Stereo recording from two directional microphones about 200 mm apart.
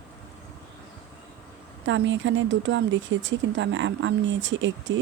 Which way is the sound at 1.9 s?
65° right (ahead or behind).